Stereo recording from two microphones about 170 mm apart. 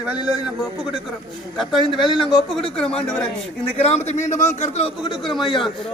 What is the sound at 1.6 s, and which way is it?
A woman's voice, centre (ahead or behind).